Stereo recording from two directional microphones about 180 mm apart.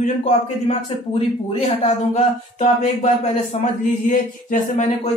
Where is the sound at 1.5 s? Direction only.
35° left (ahead or behind).